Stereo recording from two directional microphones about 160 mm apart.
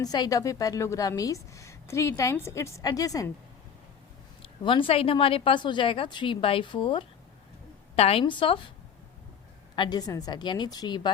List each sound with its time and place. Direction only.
0.0 s a woman's voice: 25° left (ahead or behind)
4.4 s speech: 30° left (ahead or behind)
9.7 s a woman's voice: 25° left (ahead or behind)